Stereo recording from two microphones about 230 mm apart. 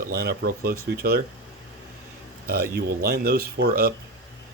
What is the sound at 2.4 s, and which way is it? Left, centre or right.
Speech, right.